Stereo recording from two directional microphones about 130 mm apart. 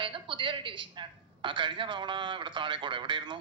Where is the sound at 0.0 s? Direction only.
40° right (ahead or behind).